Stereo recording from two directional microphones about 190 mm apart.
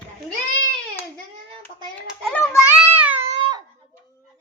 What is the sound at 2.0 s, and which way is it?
Speech, 10° left (ahead or behind).